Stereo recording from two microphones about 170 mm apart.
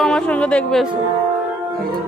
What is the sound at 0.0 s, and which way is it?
Speech, 5° left (ahead or behind).